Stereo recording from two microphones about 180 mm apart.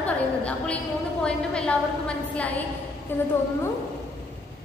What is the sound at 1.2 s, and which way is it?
Speech, 5° left (ahead or behind).